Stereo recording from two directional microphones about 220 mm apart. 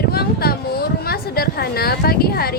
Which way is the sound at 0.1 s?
45° left (ahead or behind).